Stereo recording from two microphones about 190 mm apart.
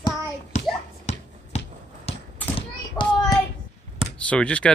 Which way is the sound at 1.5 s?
35° left (ahead or behind).